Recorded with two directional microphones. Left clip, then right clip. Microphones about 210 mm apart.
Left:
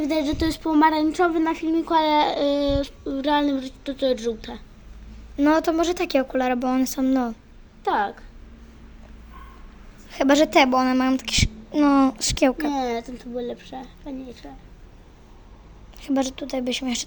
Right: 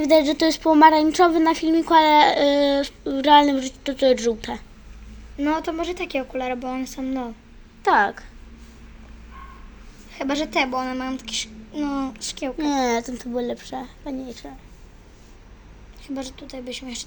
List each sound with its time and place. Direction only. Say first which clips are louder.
0.0 s speech: right 7 dB; 10° right (ahead or behind)
5.4 s speech: left 4 dB; 45° left (ahead or behind)
7.8 s speech: right 5 dB; 20° right (ahead or behind)
10.1 s a woman's voice: left 7 dB; 55° left (ahead or behind)
12.5 s speech: right 3 dB; 20° right (ahead or behind)
16.0 s speech: left 8 dB; 55° left (ahead or behind)